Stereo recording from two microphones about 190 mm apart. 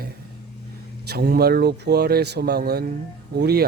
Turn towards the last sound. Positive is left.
turn(degrees=-55)  # may be behind; listen again after turning